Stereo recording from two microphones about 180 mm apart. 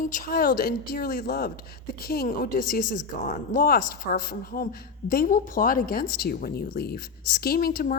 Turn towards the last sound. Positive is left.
turn(degrees=55)  # may be behind; listen again after turning